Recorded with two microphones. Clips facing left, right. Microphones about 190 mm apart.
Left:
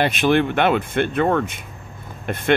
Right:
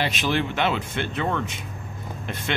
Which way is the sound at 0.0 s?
55° left (ahead or behind).